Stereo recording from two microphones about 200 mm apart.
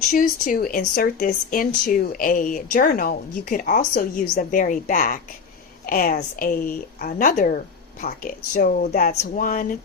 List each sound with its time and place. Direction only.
0.1 s speech: 40° left (ahead or behind)